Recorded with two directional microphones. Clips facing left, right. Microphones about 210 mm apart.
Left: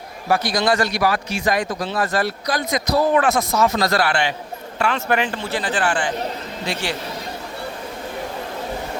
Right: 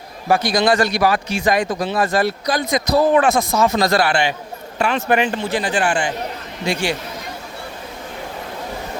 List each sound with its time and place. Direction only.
0.3 s a man's voice: 15° right (ahead or behind)